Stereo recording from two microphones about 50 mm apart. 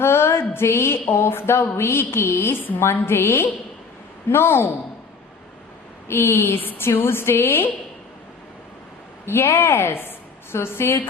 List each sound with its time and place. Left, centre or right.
0.0 s speech: left
6.1 s speech: left
6.6 s speech: left
9.2 s speech: left